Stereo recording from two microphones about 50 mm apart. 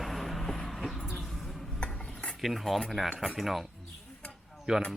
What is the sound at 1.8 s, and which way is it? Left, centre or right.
Cutlery, centre.